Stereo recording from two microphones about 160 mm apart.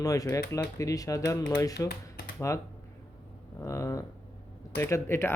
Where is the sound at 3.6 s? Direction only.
15° left (ahead or behind).